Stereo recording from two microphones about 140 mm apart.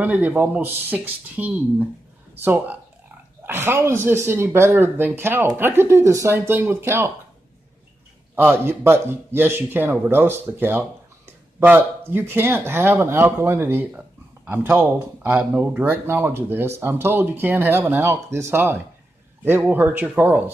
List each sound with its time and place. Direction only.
0.0 s a man's voice: 10° right (ahead or behind)
8.4 s a man's voice: 15° right (ahead or behind)